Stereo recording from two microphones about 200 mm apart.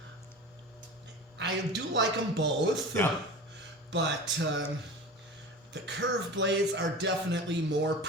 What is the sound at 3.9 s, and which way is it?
Speech, 60° right (ahead or behind).